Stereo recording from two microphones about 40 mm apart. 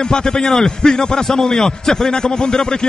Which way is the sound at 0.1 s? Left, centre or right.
Centre.